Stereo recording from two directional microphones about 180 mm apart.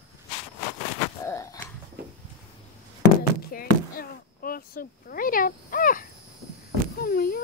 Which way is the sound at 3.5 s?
55° left (ahead or behind).